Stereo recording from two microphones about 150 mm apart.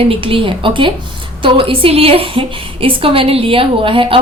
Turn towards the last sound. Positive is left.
turn(degrees=-35)  # may be behind; listen again after turning